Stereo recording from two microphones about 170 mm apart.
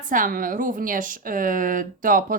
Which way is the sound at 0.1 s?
50° right (ahead or behind).